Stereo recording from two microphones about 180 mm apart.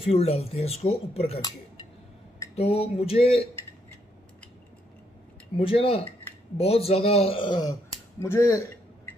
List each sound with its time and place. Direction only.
0.0 s speech: 30° left (ahead or behind)
2.5 s speech: 35° left (ahead or behind)
5.6 s speech: 30° left (ahead or behind)
8.2 s a sound: 15° left (ahead or behind)